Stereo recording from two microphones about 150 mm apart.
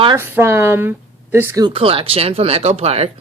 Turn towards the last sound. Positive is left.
turn(degrees=-45)  # may be behind; listen again after turning